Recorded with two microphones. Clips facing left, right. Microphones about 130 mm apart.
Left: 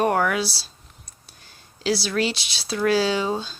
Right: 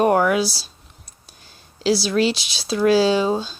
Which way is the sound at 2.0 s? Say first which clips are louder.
Right 5 dB; 25° right (ahead or behind).